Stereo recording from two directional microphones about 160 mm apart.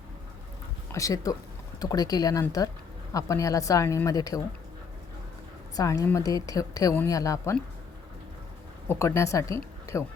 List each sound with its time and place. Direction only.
0.9 s a woman's voice: 20° left (ahead or behind)
5.7 s a woman's voice: 20° left (ahead or behind)
8.9 s speech: 15° left (ahead or behind)